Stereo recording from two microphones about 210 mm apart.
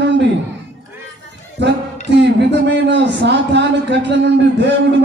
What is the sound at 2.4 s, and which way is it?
A man's voice, 55° right (ahead or behind).